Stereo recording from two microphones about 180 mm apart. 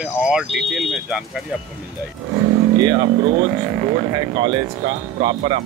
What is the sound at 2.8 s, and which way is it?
Speech, 25° right (ahead or behind).